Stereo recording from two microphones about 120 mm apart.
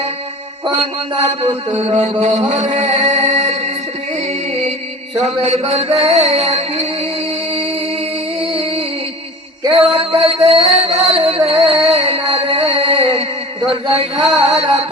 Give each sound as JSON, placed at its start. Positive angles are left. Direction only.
{"t": 0.6, "sound": "music", "side_deg": -55}
{"t": 1.5, "sound": "chant", "side_deg": -60}
{"t": 4.3, "sound": "music", "side_deg": -60}
{"t": 8.4, "sound": "music", "side_deg": -50}
{"t": 13.7, "sound": "a man's voice", "side_deg": -50}
{"t": 14.4, "sound": "music", "side_deg": -55}